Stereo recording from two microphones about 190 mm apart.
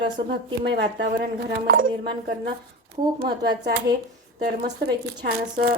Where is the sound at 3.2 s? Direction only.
55° right (ahead or behind).